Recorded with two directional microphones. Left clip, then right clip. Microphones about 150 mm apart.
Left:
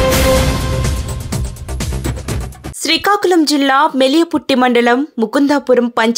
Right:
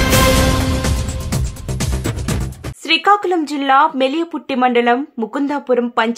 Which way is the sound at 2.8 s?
35° left (ahead or behind).